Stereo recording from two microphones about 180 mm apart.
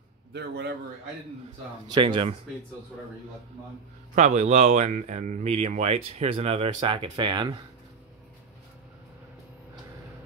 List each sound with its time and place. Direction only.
0.3 s a man's voice: 70° right (ahead or behind)
1.9 s speech: 25° right (ahead or behind)
4.1 s speech: 40° right (ahead or behind); by 7.5 s 25° right (ahead or behind)